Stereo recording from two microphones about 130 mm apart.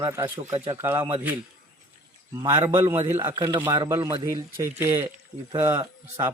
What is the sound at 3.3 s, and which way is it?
Speech, 30° right (ahead or behind).